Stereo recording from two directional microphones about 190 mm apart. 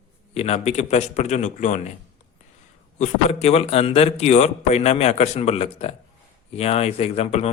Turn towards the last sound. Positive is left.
turn(degrees=35)  # may be behind; listen again after turning